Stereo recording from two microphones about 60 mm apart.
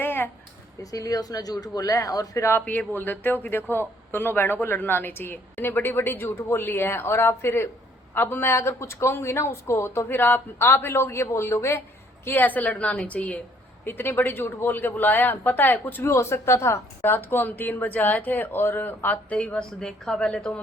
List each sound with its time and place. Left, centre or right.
0.0 s a sound: left
0.8 s speech: left
2.6 s speech: left
8.1 s speech: left
8.4 s speech: left
11.0 s a woman's voice: left
13.8 s speech: left
16.0 s speech: left
17.0 s speech: left
19.8 s a woman's voice: centre